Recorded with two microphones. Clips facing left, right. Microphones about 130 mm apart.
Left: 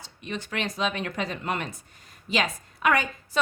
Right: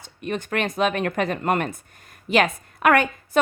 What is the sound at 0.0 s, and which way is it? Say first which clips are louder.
Speech: right 6 dB; 50° right (ahead or behind).